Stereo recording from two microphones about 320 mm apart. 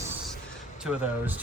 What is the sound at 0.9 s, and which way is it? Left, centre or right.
Speech, centre.